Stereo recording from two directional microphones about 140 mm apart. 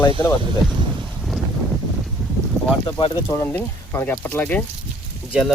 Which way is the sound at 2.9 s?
35° left (ahead or behind).